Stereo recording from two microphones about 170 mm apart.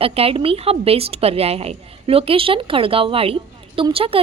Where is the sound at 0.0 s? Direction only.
35° right (ahead or behind).